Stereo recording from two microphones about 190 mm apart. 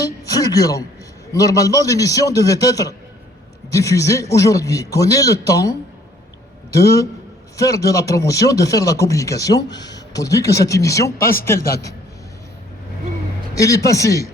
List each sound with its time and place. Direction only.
0.0 s a man's voice: 20° left (ahead or behind)
7.5 s a man's voice: 15° left (ahead or behind)
13.5 s speech: 15° left (ahead or behind)